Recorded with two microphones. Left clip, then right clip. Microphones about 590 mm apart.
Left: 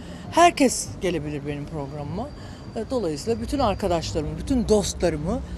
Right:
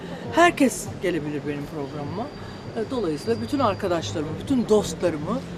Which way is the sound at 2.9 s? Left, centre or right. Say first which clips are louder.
Left 1 dB; left.